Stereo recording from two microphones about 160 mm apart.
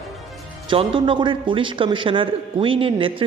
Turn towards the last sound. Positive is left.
turn(degrees=-35)  # may be behind; listen again after turning